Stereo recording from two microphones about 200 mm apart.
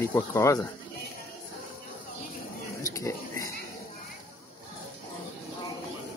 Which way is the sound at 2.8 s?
15° left (ahead or behind).